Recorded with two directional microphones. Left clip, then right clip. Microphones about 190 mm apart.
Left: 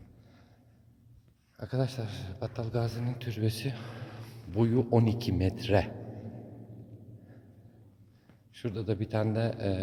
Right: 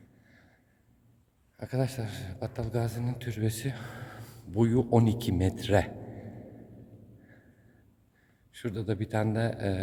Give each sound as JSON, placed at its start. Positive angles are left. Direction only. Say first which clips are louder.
{"t": 1.5, "sound": "speech", "louder": "right 1 dB", "side_deg": -25}
{"t": 8.5, "sound": "speech", "louder": "even", "side_deg": -20}